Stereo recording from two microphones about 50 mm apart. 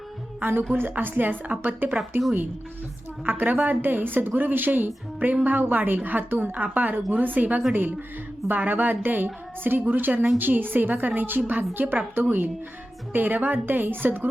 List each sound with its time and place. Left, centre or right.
0.3 s a woman's voice: right
3.2 s a woman's voice: right
13.1 s a woman's voice: right